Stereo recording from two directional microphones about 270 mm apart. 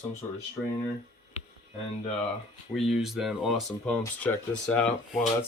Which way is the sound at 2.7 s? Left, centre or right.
Centre.